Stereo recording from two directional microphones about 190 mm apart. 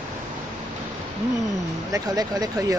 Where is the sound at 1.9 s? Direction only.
20° right (ahead or behind).